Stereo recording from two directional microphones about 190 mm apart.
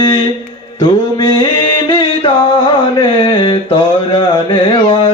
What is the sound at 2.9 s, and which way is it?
Mantra, 25° left (ahead or behind).